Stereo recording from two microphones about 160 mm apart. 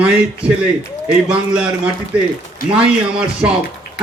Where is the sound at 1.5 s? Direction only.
5° right (ahead or behind).